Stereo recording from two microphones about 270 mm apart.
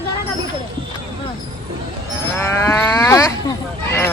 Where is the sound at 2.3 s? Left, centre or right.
Centre.